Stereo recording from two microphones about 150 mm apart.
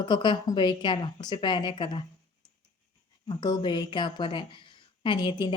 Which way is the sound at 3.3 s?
30° left (ahead or behind).